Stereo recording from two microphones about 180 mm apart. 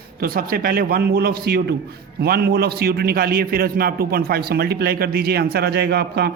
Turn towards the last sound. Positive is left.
turn(degrees=-65)  # may be behind; listen again after turning